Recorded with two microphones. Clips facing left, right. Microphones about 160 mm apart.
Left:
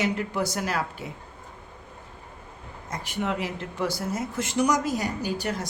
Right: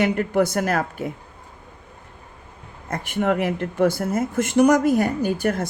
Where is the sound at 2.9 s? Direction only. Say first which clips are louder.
Right 7 dB; 55° right (ahead or behind).